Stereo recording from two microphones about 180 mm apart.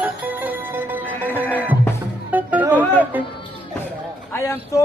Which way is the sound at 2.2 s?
10° right (ahead or behind).